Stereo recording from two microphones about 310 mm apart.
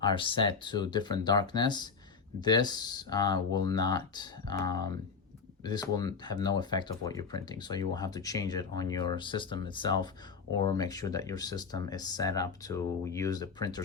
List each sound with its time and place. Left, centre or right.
0.0 s speech: centre